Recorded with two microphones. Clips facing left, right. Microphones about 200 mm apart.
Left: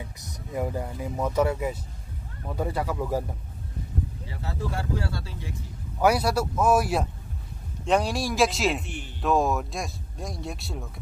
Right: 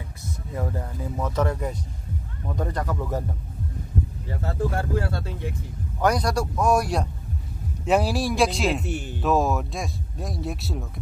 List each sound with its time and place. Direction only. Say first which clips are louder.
0.2 s speech: left 1 dB; 15° left (ahead or behind)
4.3 s speech: right 8 dB; 50° right (ahead or behind)
5.9 s speech: even; 5° left (ahead or behind)
8.8 s speech: right 8 dB; 45° right (ahead or behind)
9.2 s speech: right 1 dB; centre (ahead or behind)